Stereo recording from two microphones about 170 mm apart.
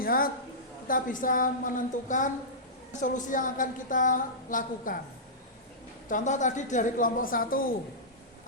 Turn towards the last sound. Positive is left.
turn(degrees=55)  # may be behind; listen again after turning